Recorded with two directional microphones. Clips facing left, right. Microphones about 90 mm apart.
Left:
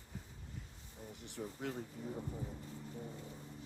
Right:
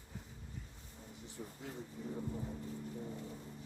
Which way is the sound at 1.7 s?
65° left (ahead or behind).